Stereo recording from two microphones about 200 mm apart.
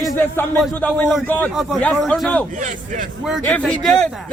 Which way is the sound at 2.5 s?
40° right (ahead or behind).